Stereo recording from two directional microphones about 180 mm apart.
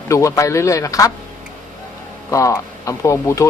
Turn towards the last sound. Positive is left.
turn(degrees=15)  # may be behind; listen again after turning